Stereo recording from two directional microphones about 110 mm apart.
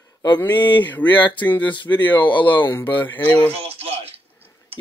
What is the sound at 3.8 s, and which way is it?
Speech, 65° right (ahead or behind).